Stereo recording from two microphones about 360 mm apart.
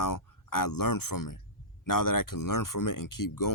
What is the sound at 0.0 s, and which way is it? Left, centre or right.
Speech, left.